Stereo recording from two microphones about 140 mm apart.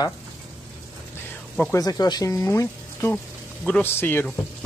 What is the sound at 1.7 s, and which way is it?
Speech, 25° left (ahead or behind).